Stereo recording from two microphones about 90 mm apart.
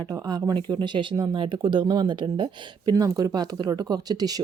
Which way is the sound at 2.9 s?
45° right (ahead or behind).